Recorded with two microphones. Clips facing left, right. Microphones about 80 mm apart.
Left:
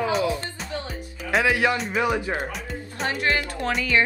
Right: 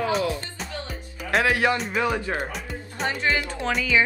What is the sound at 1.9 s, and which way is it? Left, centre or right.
Speech, centre.